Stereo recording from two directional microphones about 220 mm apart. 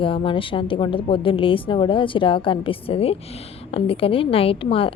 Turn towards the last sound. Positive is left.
turn(degrees=25)  # may be behind; listen again after turning